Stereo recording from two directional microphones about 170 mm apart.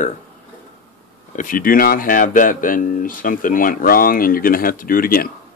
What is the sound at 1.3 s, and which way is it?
Speech, 50° left (ahead or behind).